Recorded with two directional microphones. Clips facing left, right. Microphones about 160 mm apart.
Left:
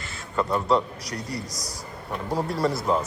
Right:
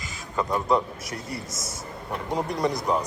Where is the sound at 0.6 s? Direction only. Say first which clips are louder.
Left 1 dB; 20° right (ahead or behind).